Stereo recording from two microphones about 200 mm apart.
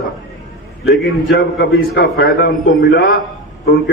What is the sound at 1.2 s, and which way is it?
A man's voice, 55° left (ahead or behind).